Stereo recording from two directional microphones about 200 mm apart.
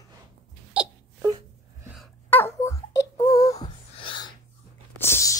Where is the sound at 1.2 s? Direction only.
20° right (ahead or behind).